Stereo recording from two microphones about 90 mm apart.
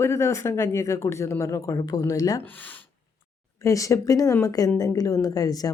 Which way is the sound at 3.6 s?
35° left (ahead or behind).